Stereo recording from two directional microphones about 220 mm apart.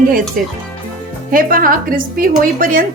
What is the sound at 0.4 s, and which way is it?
A woman's voice, 40° right (ahead or behind).